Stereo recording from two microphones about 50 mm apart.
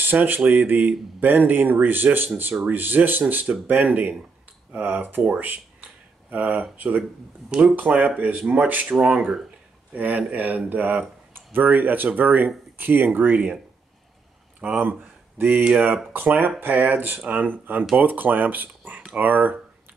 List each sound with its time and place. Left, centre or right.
0.0 s speech: right
7.8 s speech: right
8.9 s speech: centre
9.9 s speech: right
14.6 s speech: right